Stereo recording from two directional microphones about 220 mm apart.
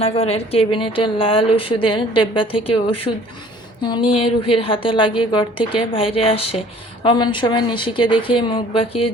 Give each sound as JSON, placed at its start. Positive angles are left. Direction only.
{"t": 0.0, "sound": "a woman's voice", "side_deg": 30}